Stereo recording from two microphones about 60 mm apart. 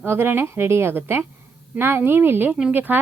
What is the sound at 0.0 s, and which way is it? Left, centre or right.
A woman's voice, right.